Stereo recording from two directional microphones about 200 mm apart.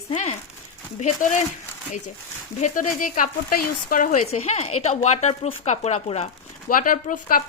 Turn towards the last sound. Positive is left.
turn(degrees=45)  # may be behind; listen again after turning